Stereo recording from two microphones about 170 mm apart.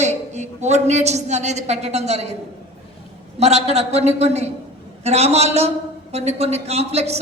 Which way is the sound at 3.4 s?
40° right (ahead or behind).